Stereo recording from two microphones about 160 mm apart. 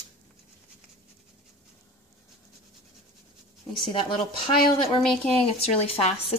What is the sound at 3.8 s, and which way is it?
Speech, 30° left (ahead or behind).